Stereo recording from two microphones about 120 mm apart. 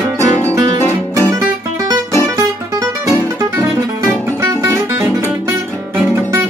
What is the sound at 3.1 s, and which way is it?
Music, 25° right (ahead or behind).